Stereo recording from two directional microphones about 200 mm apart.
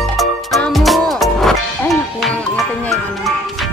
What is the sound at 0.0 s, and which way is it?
Music, centre (ahead or behind).